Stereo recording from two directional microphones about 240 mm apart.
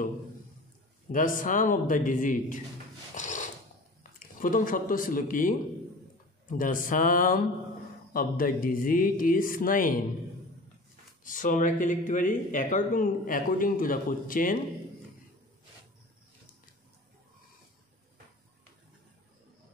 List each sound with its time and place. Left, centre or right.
1.1 s speech: left
3.2 s a sound: left
4.4 s speech: left
6.6 s speech: left
11.2 s speech: left